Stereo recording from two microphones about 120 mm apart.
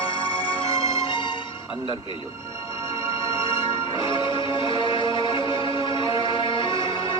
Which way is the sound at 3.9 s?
45° left (ahead or behind).